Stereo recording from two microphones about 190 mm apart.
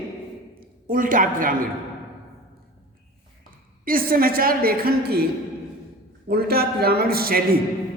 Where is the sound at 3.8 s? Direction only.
50° right (ahead or behind).